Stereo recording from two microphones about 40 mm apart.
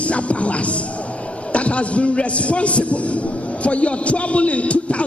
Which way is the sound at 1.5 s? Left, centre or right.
Left.